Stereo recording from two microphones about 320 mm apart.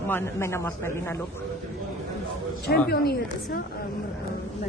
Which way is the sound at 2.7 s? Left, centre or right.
Left.